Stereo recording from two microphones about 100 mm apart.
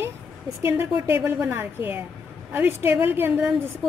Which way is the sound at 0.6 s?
20° right (ahead or behind).